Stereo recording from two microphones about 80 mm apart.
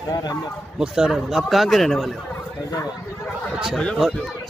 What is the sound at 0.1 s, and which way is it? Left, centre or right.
Speech, left.